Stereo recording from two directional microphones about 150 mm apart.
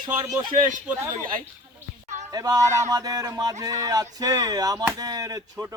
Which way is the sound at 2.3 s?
25° right (ahead or behind).